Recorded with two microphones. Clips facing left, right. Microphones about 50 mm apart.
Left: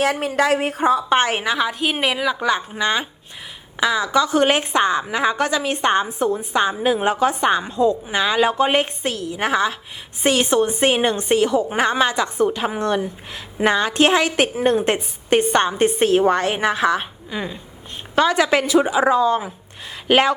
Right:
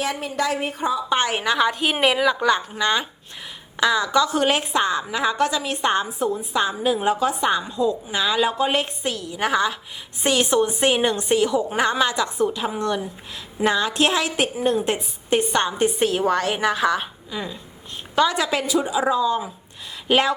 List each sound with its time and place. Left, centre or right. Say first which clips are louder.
0.0 s speech: left 5 dB; left
0.9 s a woman's voice: left 4 dB; left
1.5 s a woman's voice: even; centre
4.3 s a woman's voice: left 3 dB; left
5.5 s a woman's voice: left 3 dB; left
6.1 s a woman's voice: left 3 dB; left
9.3 s a woman's voice: left 1 dB; left
15.5 s a woman's voice: left 3 dB; left
18.3 s a woman's voice: left 5 dB; left